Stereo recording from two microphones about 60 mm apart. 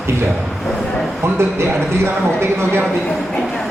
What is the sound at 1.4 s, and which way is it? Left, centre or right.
Speech, right.